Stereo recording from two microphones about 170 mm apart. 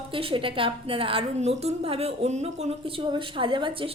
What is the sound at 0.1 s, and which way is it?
A woman's voice, 30° right (ahead or behind).